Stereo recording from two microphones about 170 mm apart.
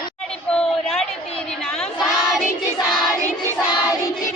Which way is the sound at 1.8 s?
Centre (ahead or behind).